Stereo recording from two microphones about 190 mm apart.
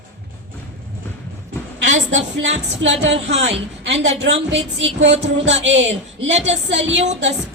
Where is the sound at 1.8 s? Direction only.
40° right (ahead or behind).